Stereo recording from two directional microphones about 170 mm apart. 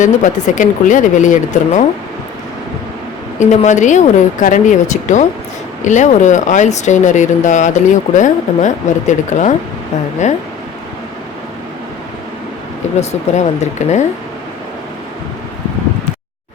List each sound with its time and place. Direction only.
0.0 s speech: 45° left (ahead or behind)
3.4 s speech: 45° left (ahead or behind)
13.0 s speech: 40° left (ahead or behind)